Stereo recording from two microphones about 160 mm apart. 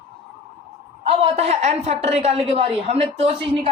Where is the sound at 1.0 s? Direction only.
40° right (ahead or behind).